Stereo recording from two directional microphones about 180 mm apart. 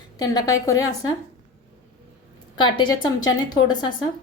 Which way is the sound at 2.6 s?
25° left (ahead or behind).